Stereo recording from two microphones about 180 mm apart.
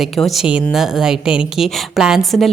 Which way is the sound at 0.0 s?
Centre (ahead or behind).